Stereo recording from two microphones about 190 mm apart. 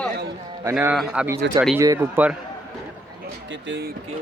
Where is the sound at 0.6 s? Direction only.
10° right (ahead or behind).